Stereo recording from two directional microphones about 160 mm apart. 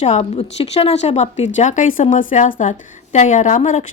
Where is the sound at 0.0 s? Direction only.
45° left (ahead or behind).